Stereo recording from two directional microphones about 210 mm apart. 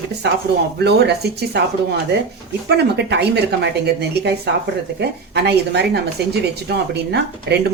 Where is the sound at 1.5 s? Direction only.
50° right (ahead or behind).